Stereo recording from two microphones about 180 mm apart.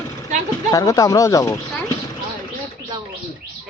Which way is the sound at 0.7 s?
20° left (ahead or behind).